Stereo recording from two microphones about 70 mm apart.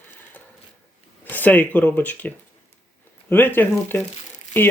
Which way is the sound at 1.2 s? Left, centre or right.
Left.